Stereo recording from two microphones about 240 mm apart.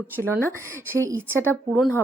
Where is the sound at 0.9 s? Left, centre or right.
Centre.